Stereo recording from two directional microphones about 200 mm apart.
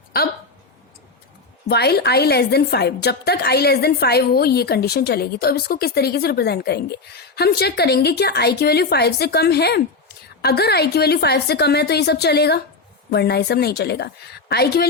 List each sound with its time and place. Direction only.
1.6 s a woman's voice: 55° left (ahead or behind)